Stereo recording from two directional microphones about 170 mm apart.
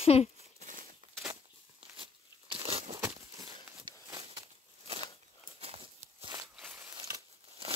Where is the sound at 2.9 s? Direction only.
20° right (ahead or behind).